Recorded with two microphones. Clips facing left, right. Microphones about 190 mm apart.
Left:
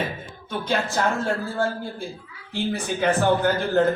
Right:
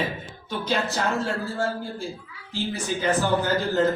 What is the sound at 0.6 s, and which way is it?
A man's voice, 50° left (ahead or behind).